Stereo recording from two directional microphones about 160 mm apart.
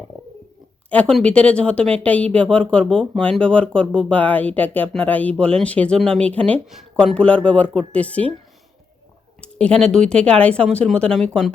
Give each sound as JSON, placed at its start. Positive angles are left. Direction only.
{"t": 0.9, "sound": "speech", "side_deg": 5}
{"t": 9.4, "sound": "speech", "side_deg": 5}